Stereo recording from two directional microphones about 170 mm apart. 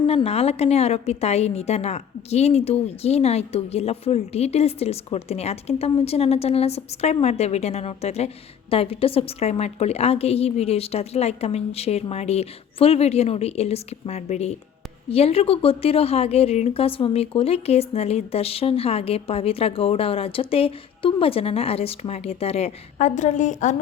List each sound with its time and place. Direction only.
0.0 s a woman's voice: 35° left (ahead or behind)